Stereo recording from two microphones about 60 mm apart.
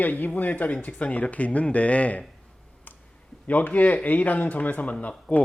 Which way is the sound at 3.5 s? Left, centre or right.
Left.